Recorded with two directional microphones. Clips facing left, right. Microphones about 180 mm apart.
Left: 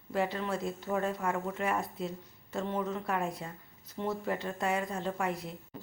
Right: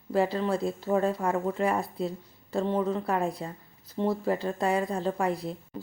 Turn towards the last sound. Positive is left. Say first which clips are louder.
# right 7 dB
turn(degrees=-35)  # may be behind; listen again after turning